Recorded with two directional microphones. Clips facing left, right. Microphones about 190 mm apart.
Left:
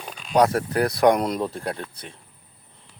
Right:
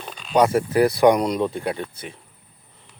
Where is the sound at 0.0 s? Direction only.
10° left (ahead or behind).